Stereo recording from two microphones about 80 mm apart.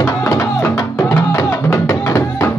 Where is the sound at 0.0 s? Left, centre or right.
Left.